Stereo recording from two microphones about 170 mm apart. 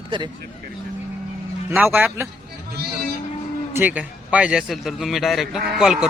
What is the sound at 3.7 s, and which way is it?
A man's voice, 10° right (ahead or behind).